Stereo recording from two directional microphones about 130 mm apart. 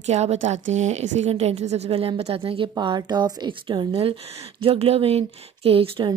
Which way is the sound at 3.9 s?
55° right (ahead or behind).